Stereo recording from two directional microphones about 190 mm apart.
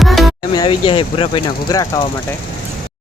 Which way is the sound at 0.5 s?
25° left (ahead or behind).